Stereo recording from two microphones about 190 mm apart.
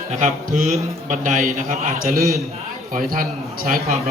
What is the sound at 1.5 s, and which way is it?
A man's voice, 50° right (ahead or behind).